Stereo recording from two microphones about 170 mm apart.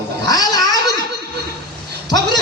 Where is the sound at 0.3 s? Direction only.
20° left (ahead or behind).